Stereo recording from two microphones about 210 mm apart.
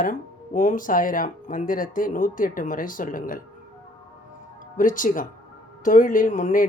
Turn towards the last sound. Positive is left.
turn(degrees=40)  # may be behind; listen again after turning